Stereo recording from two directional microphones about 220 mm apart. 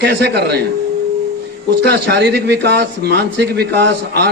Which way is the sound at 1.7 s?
50° right (ahead or behind).